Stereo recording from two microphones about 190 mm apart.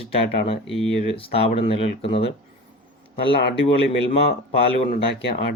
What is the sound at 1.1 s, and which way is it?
Speech, 30° left (ahead or behind).